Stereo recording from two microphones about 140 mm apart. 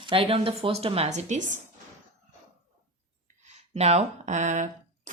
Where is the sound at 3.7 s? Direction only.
50° right (ahead or behind).